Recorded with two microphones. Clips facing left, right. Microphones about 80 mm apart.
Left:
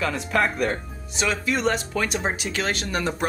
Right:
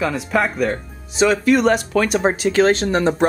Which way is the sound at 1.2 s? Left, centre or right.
Right.